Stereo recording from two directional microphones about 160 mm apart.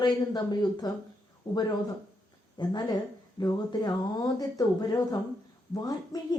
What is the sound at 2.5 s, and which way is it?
Speech, 25° left (ahead or behind).